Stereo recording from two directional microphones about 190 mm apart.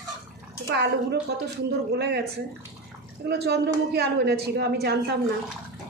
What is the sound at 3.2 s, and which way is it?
A woman's voice, 60° right (ahead or behind).